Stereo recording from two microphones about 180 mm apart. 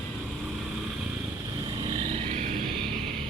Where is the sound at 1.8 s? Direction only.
30° right (ahead or behind).